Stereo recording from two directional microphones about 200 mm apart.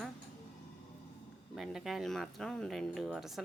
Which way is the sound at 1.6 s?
Centre (ahead or behind).